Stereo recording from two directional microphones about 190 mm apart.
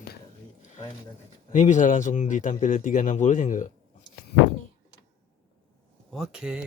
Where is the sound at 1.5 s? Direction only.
40° left (ahead or behind).